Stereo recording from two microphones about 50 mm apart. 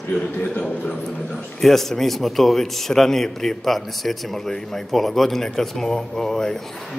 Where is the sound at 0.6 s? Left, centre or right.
Left.